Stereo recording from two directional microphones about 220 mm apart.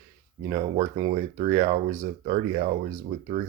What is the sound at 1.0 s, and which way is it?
Speech, 30° right (ahead or behind).